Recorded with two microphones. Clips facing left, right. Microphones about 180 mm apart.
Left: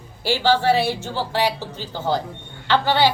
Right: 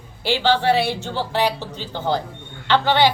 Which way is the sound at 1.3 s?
10° left (ahead or behind).